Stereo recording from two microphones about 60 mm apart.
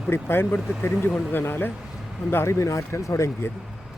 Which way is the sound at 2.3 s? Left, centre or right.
Left.